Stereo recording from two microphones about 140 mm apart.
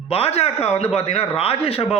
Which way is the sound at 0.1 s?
45° left (ahead or behind).